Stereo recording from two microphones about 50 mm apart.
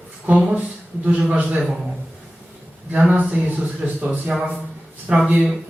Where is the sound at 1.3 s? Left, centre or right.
Right.